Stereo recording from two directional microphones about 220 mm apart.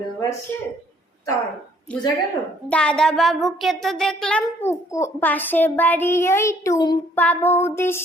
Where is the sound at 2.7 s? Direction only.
5° left (ahead or behind).